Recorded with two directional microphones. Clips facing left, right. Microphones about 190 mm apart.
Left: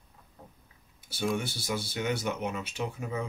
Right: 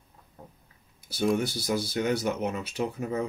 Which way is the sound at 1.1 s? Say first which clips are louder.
Right 5 dB; 40° right (ahead or behind).